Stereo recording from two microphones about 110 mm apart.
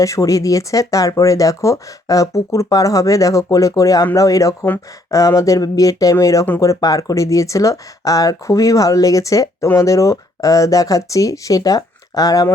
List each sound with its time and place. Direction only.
0.0 s speech: 30° left (ahead or behind)